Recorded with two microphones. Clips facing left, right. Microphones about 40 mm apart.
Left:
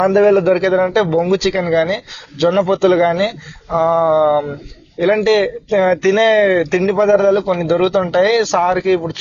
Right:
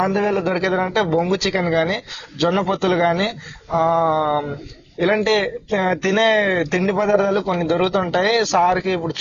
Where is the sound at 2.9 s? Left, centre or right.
Left.